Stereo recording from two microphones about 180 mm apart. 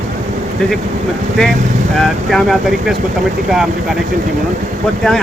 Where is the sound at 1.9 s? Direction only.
Centre (ahead or behind).